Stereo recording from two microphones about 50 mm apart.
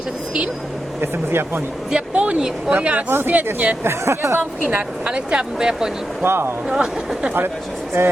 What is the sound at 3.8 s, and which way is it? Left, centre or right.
Speech, right.